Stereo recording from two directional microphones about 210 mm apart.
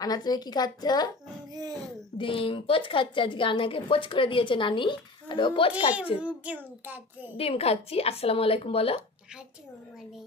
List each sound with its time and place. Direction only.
0.0 s a woman's voice: 20° left (ahead or behind)
1.5 s a child's voice: 20° right (ahead or behind)
2.1 s a woman's voice: 25° left (ahead or behind)
6.2 s a child's voice: 5° right (ahead or behind)
7.3 s a woman's voice: 30° left (ahead or behind)